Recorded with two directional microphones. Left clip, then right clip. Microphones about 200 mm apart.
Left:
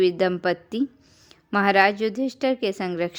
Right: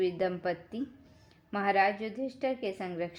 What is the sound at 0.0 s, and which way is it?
A woman's voice, 35° left (ahead or behind).